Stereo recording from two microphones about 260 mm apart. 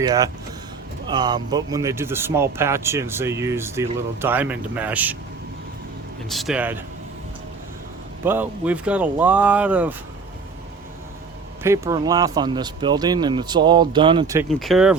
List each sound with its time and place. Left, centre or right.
0.0 s speech: centre
6.2 s speech: centre
8.2 s speech: centre
11.6 s speech: centre
14.5 s speech: centre